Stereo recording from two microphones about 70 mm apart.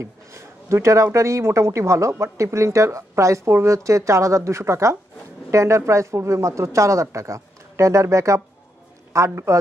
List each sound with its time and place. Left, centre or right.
0.0 s a woman's voice: right